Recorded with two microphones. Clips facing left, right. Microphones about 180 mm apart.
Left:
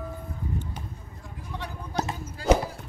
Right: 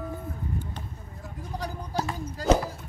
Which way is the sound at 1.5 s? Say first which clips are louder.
Right 2 dB; 35° right (ahead or behind).